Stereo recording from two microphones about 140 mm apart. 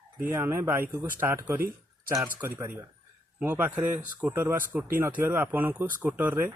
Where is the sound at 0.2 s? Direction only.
15° right (ahead or behind).